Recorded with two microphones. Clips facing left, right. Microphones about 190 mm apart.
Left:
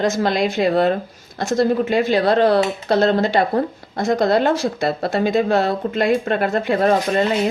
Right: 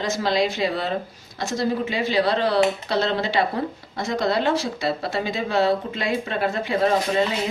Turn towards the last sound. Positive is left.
turn(degrees=55)  # may be behind; listen again after turning